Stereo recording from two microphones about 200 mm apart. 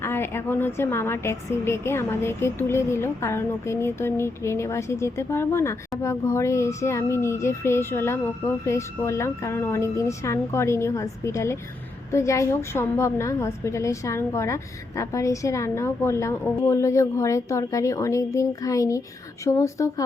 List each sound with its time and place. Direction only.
0.0 s a woman's voice: 10° left (ahead or behind)